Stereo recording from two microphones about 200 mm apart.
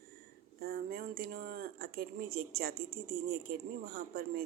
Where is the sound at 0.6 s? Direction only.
50° right (ahead or behind).